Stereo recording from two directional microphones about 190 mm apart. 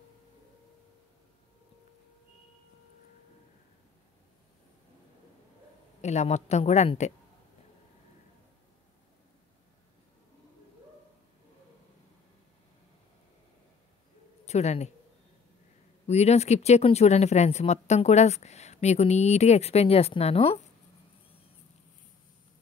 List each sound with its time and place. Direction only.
5.9 s speech: 35° left (ahead or behind)
14.4 s speech: 35° left (ahead or behind)
16.1 s speech: 35° left (ahead or behind)